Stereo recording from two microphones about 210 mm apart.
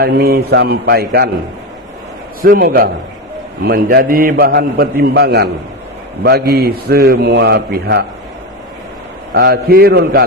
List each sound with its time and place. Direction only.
0.0 s a man's voice: 45° right (ahead or behind)
2.4 s a man's voice: 45° right (ahead or behind)
9.3 s a man's voice: 50° right (ahead or behind)